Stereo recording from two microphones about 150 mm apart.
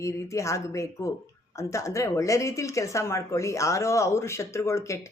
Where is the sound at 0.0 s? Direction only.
20° left (ahead or behind).